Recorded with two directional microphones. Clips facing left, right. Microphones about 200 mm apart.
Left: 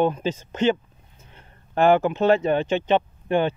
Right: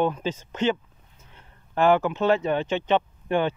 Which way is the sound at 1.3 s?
55° left (ahead or behind).